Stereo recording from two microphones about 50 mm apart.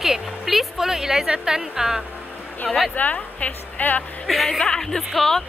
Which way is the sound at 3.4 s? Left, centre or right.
Left.